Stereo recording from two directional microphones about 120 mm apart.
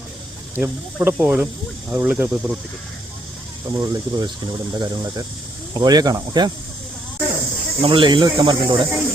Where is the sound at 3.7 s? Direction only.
35° right (ahead or behind).